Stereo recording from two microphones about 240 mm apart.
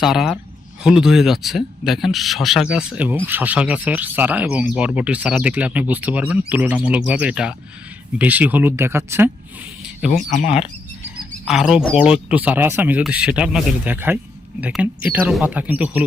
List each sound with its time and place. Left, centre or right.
0.0 s speech: centre
10.2 s speech: left
11.4 s speech: centre